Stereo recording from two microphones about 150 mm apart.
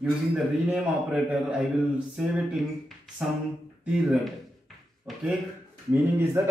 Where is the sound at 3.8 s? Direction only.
5° right (ahead or behind).